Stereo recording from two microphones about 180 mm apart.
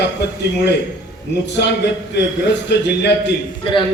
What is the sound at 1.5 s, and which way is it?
A man's voice, 70° left (ahead or behind).